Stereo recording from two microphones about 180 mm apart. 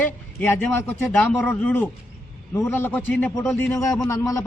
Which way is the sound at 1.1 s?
10° left (ahead or behind).